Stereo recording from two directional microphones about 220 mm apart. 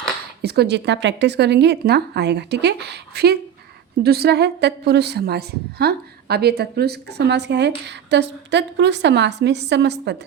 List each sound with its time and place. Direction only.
0.4 s a woman's voice: 45° right (ahead or behind)